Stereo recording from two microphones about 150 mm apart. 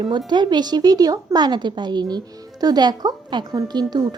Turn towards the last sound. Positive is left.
turn(degrees=-30)  # may be behind; listen again after turning